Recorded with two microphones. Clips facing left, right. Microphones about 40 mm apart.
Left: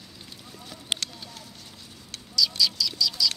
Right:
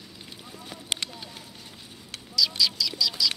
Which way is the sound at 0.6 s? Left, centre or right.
Centre.